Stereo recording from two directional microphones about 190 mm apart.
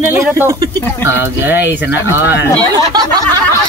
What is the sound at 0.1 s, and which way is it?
Speech, 10° right (ahead or behind).